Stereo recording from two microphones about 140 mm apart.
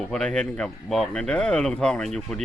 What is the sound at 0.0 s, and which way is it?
Speech, 5° left (ahead or behind).